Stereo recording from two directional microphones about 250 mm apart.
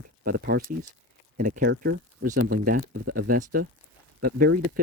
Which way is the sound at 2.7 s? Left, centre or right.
Right.